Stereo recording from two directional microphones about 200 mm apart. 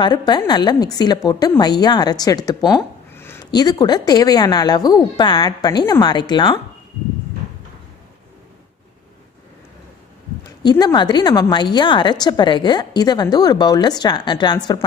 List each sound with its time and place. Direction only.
0.0 s a woman's voice: 20° left (ahead or behind)
10.6 s a woman's voice: 20° left (ahead or behind)